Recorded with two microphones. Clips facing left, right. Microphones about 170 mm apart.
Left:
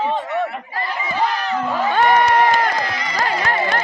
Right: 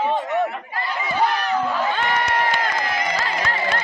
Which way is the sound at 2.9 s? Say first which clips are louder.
Right 2 dB; 50° right (ahead or behind).